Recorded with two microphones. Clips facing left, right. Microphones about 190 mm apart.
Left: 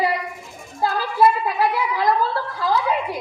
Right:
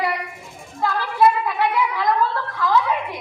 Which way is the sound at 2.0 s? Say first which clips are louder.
Left 4 dB; 30° left (ahead or behind).